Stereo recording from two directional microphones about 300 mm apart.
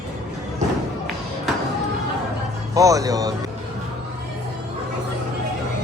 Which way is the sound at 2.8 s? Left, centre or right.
Centre.